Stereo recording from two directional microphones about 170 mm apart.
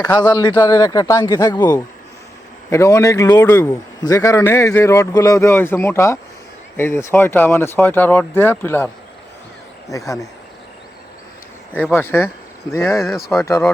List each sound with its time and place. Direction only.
0.0 s a man's voice: 25° left (ahead or behind)
9.9 s a man's voice: 20° left (ahead or behind)
11.7 s a man's voice: 10° left (ahead or behind)
13.0 s speech: centre (ahead or behind)
13.4 s a man's voice: 10° left (ahead or behind)